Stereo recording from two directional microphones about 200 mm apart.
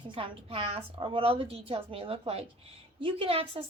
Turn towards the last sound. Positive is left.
turn(degrees=-30)  # may be behind; listen again after turning